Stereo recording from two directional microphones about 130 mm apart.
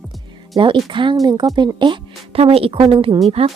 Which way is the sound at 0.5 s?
40° right (ahead or behind).